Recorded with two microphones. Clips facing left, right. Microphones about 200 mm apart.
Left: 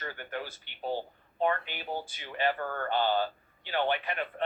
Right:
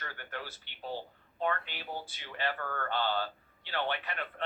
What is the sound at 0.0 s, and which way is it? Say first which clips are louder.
Speech: left 5 dB; 15° left (ahead or behind).